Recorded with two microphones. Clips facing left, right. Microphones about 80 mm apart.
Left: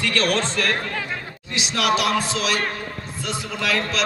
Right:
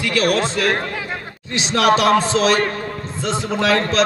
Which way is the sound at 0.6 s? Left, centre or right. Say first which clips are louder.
Right 4 dB; right.